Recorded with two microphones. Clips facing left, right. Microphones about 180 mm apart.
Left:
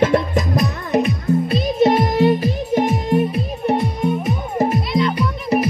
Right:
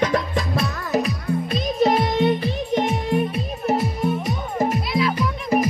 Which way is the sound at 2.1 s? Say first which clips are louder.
Left 4 dB; 40° left (ahead or behind).